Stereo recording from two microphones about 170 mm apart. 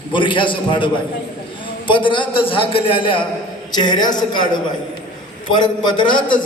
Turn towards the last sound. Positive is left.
turn(degrees=25)  # may be behind; listen again after turning